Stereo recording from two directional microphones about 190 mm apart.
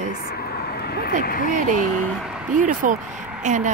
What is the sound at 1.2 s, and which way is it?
Speech, 50° left (ahead or behind).